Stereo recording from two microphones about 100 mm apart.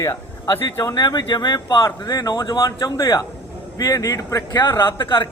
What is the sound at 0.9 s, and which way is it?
A man's voice, 40° left (ahead or behind).